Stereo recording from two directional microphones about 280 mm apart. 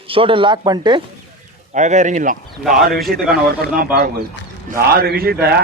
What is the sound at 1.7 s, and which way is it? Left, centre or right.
Speech, right.